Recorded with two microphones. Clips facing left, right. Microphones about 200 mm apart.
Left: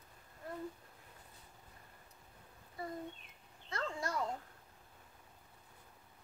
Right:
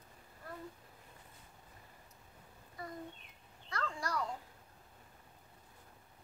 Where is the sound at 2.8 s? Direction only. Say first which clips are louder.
Left 3 dB; 25° left (ahead or behind).